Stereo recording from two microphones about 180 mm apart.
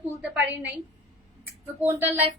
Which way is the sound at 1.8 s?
10° right (ahead or behind).